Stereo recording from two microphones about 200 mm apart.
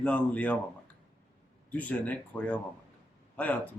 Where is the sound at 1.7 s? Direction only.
10° left (ahead or behind).